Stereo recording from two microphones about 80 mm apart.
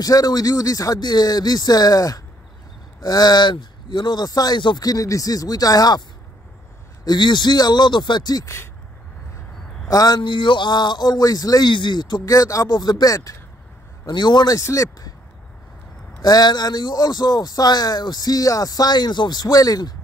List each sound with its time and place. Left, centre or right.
0.0 s speech: left
4.8 s speech: left
7.1 s speech: left
9.8 s speech: left
11.7 s speech: left
12.3 s speech: left
12.6 s speech: left
14.0 s speech: left
14.5 s speech: left
16.2 s speech: left